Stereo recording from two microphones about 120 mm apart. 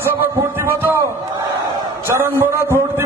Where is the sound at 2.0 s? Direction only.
20° right (ahead or behind).